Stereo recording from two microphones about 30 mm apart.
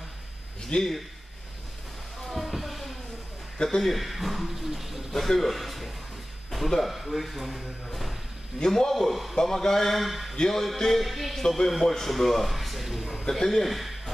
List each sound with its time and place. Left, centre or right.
0.7 s speech: left
2.2 s a sound: centre
3.6 s speech: centre
5.1 s speech: centre
8.6 s a man's voice: centre
8.9 s speech: centre
9.3 s a man's voice: centre
9.9 s speech: centre
10.3 s music: left
10.8 s speech: centre
11.4 s a man's voice: centre
13.2 s a man's voice: centre
13.7 s a man's voice: centre